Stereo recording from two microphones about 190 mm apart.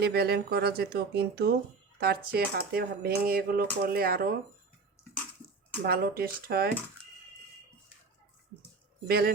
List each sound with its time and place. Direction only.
0.0 s speech: 60° right (ahead or behind)
5.0 s a sound: 15° left (ahead or behind)
5.8 s speech: 55° right (ahead or behind)
9.0 s speech: 55° right (ahead or behind)